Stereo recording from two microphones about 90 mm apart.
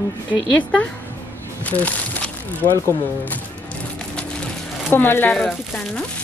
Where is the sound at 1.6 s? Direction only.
15° left (ahead or behind).